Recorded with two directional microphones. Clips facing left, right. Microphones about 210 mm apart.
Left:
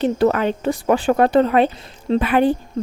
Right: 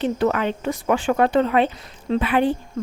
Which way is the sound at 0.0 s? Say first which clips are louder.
Left 4 dB; 40° left (ahead or behind).